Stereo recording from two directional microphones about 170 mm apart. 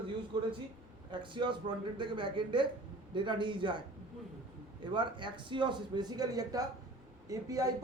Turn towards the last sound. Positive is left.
turn(degrees=-20)  # may be behind; listen again after turning